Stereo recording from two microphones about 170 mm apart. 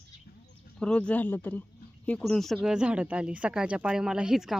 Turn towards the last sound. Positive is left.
turn(degrees=0)  # may be behind; listen again after turning